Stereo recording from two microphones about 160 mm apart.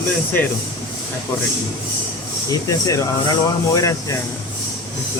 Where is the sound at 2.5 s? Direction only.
20° left (ahead or behind).